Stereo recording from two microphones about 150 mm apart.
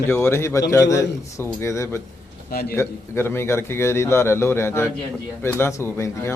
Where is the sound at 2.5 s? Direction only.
85° left.